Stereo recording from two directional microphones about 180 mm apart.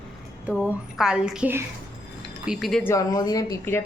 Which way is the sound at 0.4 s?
Centre (ahead or behind).